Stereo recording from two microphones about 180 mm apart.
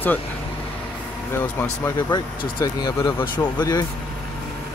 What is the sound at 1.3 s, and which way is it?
Speech, 15° left (ahead or behind).